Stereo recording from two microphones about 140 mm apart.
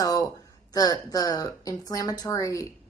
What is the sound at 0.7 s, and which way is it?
A woman's voice, 25° left (ahead or behind).